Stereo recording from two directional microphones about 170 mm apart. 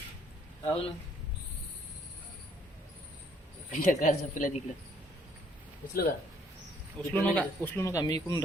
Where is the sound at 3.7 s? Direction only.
50° left (ahead or behind).